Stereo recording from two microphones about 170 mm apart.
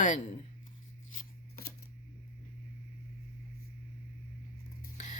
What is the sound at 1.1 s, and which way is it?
Scissors, 50° left (ahead or behind).